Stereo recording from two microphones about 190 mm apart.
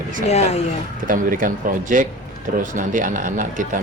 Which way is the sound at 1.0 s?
45° right (ahead or behind).